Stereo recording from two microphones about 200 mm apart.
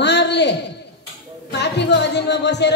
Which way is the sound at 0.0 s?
60° left (ahead or behind).